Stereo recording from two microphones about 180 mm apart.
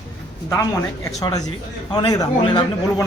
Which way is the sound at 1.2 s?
20° left (ahead or behind).